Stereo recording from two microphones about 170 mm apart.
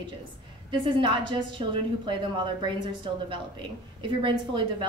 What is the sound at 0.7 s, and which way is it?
A woman's voice, 30° right (ahead or behind).